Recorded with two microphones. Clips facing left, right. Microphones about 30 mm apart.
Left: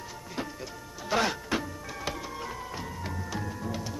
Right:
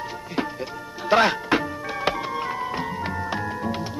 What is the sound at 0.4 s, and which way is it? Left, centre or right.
Music, right.